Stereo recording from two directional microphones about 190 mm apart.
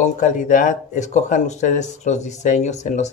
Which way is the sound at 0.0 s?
40° left (ahead or behind).